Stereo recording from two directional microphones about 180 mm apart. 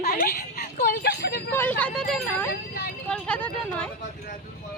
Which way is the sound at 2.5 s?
60° left (ahead or behind).